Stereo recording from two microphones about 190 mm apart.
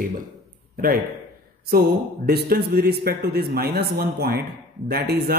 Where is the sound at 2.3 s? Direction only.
55° right (ahead or behind).